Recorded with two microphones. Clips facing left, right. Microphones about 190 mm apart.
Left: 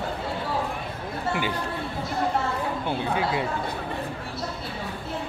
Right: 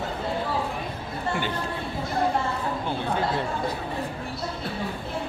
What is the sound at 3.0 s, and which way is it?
Speech, 10° left (ahead or behind).